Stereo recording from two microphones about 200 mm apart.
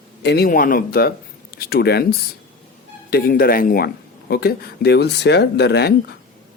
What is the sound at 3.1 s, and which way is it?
Speech, 50° left (ahead or behind).